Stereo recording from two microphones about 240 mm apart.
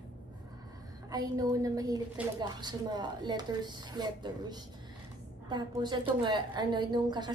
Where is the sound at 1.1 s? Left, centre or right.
Centre.